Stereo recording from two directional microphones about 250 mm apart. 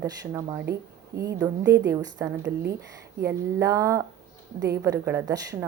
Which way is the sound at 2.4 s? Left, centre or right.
Right.